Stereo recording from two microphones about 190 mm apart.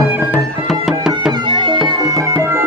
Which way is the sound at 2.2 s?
15° right (ahead or behind).